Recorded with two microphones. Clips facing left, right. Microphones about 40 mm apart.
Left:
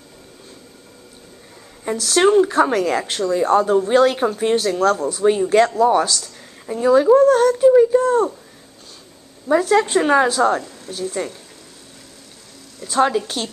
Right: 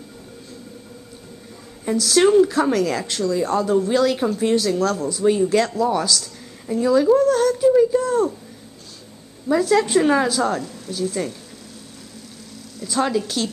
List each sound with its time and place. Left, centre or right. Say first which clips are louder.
2.0 s a woman's voice: even; left
9.5 s a woman's voice: left 2 dB; centre
12.8 s a woman's voice: left 4 dB; left